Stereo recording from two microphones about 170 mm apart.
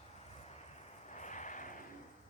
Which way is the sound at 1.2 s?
45° left (ahead or behind).